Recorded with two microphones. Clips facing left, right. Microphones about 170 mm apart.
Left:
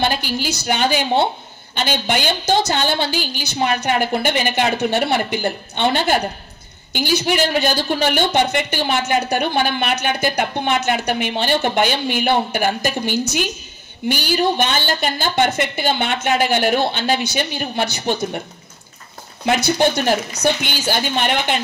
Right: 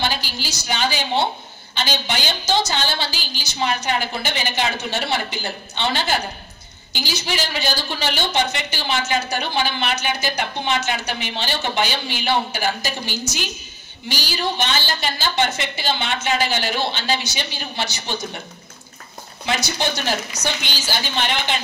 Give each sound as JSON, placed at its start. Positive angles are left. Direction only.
{"t": 0.0, "sound": "a woman's voice", "side_deg": 55}
{"t": 19.4, "sound": "a woman's voice", "side_deg": 55}